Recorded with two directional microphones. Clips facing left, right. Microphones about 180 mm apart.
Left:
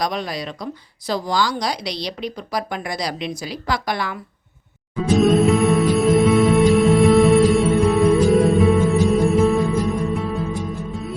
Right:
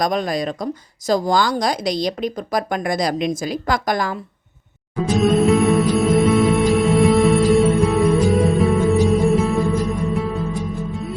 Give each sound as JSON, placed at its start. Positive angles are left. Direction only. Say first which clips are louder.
{"t": 0.0, "sound": "speech", "louder": "right 5 dB", "side_deg": -45}
{"t": 5.1, "sound": "music", "louder": "even", "side_deg": 0}